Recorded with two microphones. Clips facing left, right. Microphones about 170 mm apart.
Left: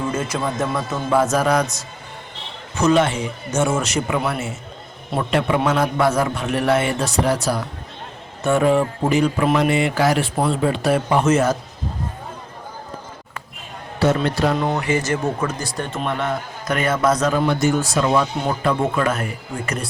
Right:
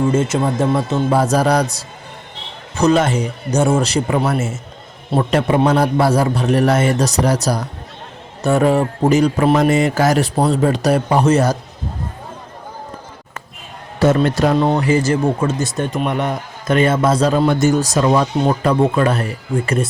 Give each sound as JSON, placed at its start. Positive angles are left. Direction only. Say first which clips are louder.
{"t": 0.1, "sound": "speech", "louder": "right 6 dB", "side_deg": -25}
{"t": 2.8, "sound": "speech", "louder": "right 2 dB", "side_deg": -40}
{"t": 14.0, "sound": "speech", "louder": "right 4 dB", "side_deg": -45}
{"t": 14.6, "sound": "a man's voice", "louder": "right 6 dB", "side_deg": -30}
{"t": 17.6, "sound": "a man's voice", "louder": "right 4 dB", "side_deg": -40}